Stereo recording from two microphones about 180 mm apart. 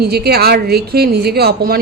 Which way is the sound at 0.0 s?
60° right (ahead or behind).